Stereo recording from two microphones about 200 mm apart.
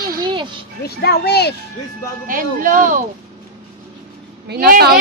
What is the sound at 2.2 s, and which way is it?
Speech, 45° right (ahead or behind).